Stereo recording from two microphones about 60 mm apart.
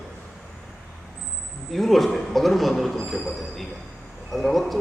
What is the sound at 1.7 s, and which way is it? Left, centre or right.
Speech, centre.